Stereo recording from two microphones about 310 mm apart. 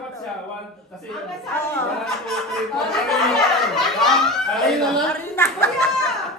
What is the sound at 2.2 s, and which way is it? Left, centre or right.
Chatter, centre.